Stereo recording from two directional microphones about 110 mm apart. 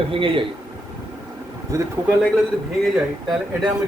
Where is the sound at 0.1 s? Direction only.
55° right (ahead or behind).